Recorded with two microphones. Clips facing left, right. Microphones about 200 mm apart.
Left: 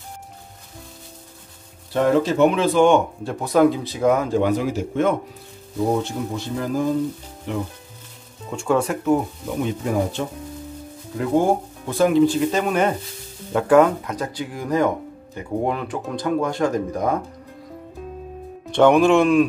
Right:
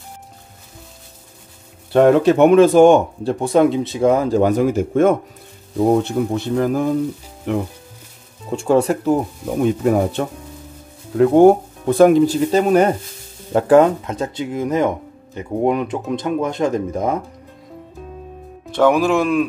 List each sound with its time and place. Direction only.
1.9 s speech: 65° right (ahead or behind); by 3.3 s 40° right (ahead or behind)
3.3 s speech: 25° right (ahead or behind); by 5.1 s 50° right (ahead or behind)
6.0 s speech: 60° right (ahead or behind)
8.5 s speech: 35° right (ahead or behind)
9.6 s speech: 55° right (ahead or behind)
12.3 s speech: 35° right (ahead or behind)
18.7 s speech: centre (ahead or behind)